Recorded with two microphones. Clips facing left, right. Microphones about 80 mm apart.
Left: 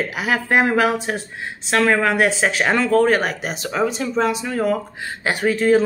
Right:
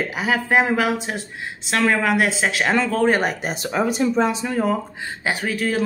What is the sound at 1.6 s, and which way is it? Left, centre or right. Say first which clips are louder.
Speech: left 2 dB; centre.